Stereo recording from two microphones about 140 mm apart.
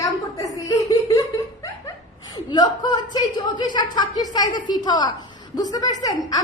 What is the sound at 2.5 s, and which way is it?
A woman's voice, 30° left (ahead or behind).